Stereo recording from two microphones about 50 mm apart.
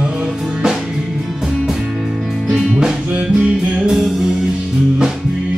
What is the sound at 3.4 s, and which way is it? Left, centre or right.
Music, centre.